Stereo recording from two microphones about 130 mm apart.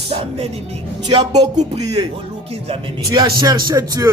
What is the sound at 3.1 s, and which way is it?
A man's voice, 30° right (ahead or behind).